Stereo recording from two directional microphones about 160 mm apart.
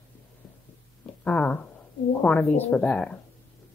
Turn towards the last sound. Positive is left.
turn(degrees=10)  # may be behind; listen again after turning